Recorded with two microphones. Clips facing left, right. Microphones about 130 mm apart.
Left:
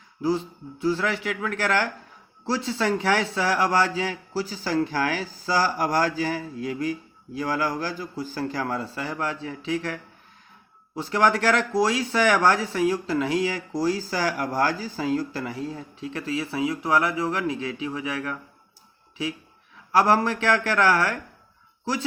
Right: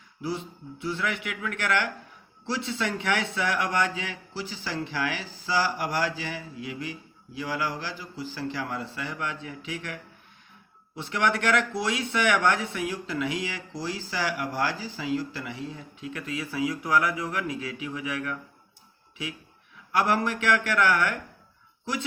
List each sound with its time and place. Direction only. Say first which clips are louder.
0.2 s speech: left 7 dB; 35° left (ahead or behind)
19.9 s speech: left 5 dB; 35° left (ahead or behind)